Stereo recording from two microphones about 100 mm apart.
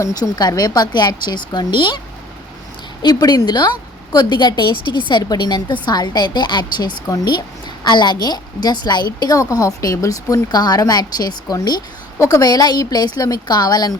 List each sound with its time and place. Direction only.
0.0 s a woman's voice: 40° left (ahead or behind)
3.0 s a woman's voice: 45° left (ahead or behind)